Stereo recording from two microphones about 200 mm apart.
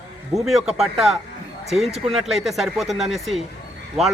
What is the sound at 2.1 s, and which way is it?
A man's voice, centre (ahead or behind).